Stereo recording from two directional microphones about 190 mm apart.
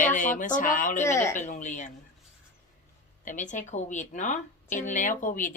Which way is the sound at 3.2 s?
40° left (ahead or behind).